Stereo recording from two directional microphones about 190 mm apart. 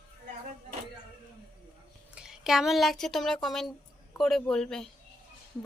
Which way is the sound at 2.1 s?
5° right (ahead or behind).